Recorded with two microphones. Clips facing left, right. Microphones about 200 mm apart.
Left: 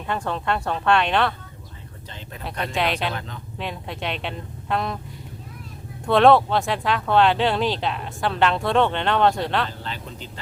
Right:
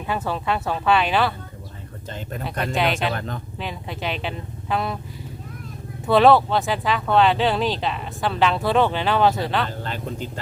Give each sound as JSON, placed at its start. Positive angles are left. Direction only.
{"t": 0.1, "sound": "speech", "side_deg": -5}
{"t": 2.0, "sound": "speech", "side_deg": -50}
{"t": 2.4, "sound": "speech", "side_deg": 0}
{"t": 3.2, "sound": "speech", "side_deg": -50}
{"t": 3.6, "sound": "speech", "side_deg": 0}
{"t": 6.1, "sound": "speech", "side_deg": 0}
{"t": 9.6, "sound": "speech", "side_deg": -50}